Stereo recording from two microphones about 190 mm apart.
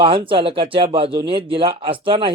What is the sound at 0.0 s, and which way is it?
Speech, 25° right (ahead or behind).